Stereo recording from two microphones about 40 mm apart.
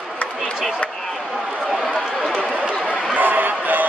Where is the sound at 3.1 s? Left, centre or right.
Right.